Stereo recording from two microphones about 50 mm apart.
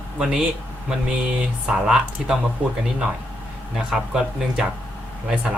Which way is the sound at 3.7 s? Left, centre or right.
Centre.